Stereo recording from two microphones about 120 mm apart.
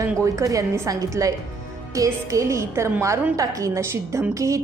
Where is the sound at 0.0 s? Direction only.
25° right (ahead or behind).